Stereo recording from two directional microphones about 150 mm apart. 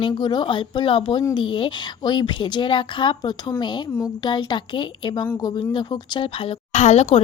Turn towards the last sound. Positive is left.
turn(degrees=45)  # may be behind; listen again after turning